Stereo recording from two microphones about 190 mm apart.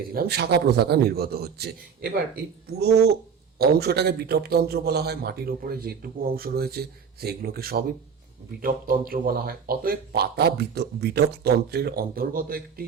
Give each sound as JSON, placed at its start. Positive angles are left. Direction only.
{"t": 0.1, "sound": "a man's voice", "side_deg": -55}